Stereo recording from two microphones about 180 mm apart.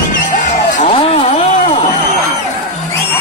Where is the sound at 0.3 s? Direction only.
45° left (ahead or behind).